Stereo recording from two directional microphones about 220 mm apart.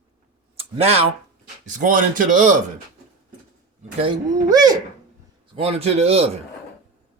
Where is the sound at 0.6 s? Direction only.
25° right (ahead or behind).